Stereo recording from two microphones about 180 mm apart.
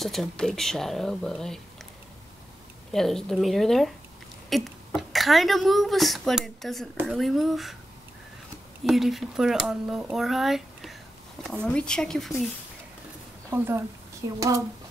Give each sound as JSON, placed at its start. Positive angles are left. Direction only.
{"t": 0.0, "sound": "speech", "side_deg": 0}
{"t": 2.9, "sound": "speech", "side_deg": 0}
{"t": 8.8, "sound": "speech", "side_deg": 0}
{"t": 13.5, "sound": "speech", "side_deg": -15}